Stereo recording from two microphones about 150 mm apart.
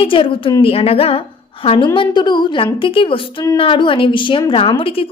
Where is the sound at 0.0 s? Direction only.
35° left (ahead or behind).